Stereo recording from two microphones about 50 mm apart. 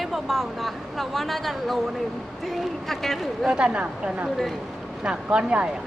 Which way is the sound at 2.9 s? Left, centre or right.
Centre.